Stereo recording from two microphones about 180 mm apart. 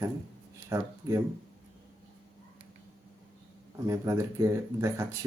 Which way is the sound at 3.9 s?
15° right (ahead or behind).